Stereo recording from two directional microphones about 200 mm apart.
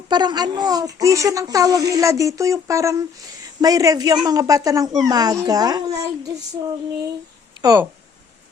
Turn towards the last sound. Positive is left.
turn(degrees=-15)  # may be behind; listen again after turning